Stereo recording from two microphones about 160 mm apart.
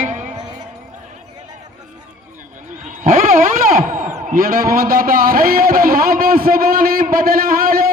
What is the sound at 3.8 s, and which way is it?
A man's voice, 50° right (ahead or behind).